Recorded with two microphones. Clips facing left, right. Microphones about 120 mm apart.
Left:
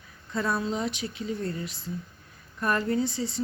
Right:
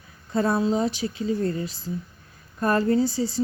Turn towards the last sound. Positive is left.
turn(degrees=-35)  # may be behind; listen again after turning